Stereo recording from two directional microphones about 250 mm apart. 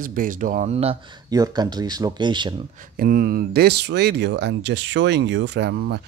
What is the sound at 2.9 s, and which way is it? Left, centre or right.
Speech, right.